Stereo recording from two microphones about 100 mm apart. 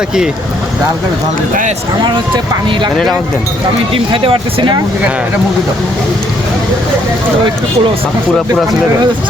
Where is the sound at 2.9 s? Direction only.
Centre (ahead or behind).